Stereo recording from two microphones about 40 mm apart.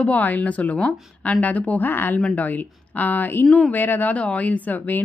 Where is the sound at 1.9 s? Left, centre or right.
Left.